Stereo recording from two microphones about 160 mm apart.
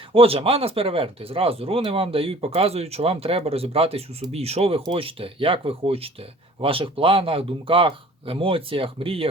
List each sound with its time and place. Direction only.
0.1 s speech: 35° right (ahead or behind)